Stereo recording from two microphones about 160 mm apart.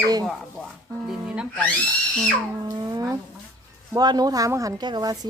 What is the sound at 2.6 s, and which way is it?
Speech, 25° right (ahead or behind).